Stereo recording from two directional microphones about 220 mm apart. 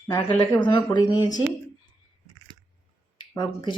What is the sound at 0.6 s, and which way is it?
Speech, 20° left (ahead or behind).